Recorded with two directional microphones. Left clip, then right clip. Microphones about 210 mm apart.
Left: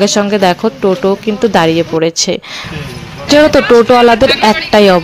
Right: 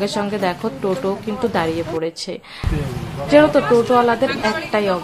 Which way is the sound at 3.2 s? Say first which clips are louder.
Left 6 dB; 40° left (ahead or behind).